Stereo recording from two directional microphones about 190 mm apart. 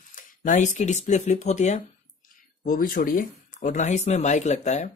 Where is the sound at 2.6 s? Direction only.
50° left (ahead or behind).